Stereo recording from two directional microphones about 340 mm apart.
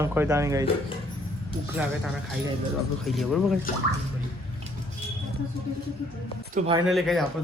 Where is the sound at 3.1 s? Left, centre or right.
Centre.